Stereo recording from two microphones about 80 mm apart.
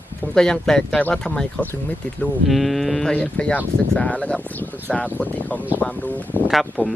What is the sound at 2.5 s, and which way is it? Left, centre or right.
Speech, centre.